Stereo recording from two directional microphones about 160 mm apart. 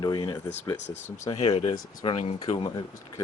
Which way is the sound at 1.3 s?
40° left (ahead or behind).